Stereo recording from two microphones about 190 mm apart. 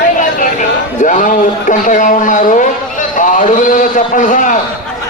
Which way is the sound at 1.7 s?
40° left (ahead or behind).